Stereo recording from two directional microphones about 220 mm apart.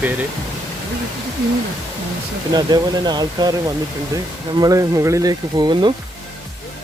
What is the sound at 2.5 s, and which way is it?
Speech, 20° right (ahead or behind).